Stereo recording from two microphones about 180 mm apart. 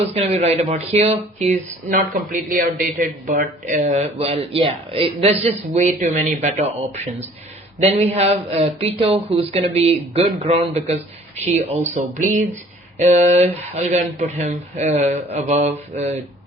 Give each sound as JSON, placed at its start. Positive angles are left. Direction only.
{"t": 0.1, "sound": "speech", "side_deg": -35}